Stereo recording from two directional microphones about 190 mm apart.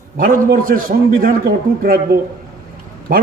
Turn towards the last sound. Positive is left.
turn(degrees=-50)  # may be behind; listen again after turning